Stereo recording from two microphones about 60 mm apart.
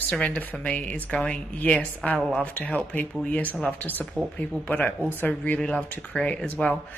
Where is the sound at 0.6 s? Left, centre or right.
Left.